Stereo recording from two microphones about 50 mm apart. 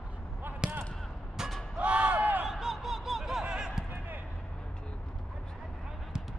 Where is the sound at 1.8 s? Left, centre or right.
Right.